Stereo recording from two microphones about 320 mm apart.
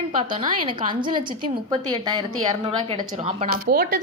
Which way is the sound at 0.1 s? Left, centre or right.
Centre.